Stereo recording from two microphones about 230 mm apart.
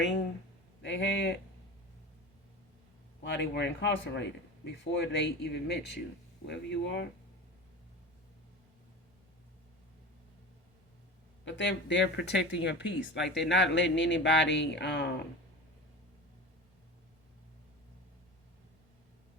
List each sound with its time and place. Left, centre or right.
0.8 s speech: left
3.2 s speech: left
11.4 s speech: left
13.1 s speech: centre
13.5 s speech: left